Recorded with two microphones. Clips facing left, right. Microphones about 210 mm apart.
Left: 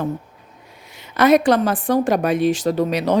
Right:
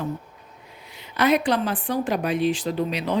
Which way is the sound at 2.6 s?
75° left (ahead or behind).